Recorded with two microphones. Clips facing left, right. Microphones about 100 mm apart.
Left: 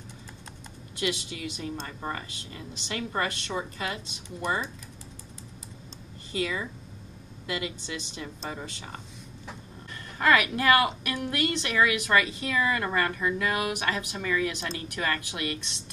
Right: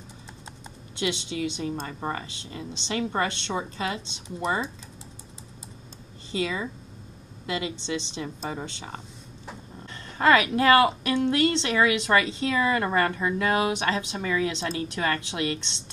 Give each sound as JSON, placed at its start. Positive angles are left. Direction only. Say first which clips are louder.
{"t": 0.9, "sound": "a woman's voice", "louder": "right 3 dB", "side_deg": -25}
{"t": 6.3, "sound": "a woman's voice", "louder": "right 2 dB", "side_deg": -25}
{"t": 10.1, "sound": "a woman's voice", "louder": "right 3 dB", "side_deg": -25}